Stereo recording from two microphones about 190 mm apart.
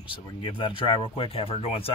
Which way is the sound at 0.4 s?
25° left (ahead or behind).